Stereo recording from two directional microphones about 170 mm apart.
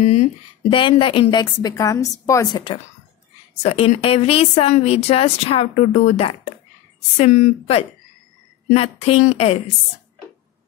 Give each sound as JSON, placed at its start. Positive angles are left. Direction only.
{"t": 0.0, "sound": "a woman's voice", "side_deg": 40}